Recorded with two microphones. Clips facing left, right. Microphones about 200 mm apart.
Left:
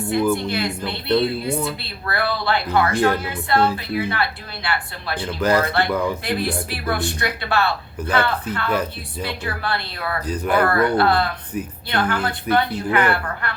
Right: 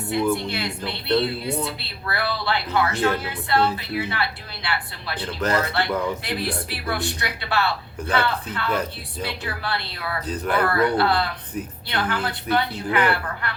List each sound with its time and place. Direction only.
0.1 s speech: 50° left (ahead or behind)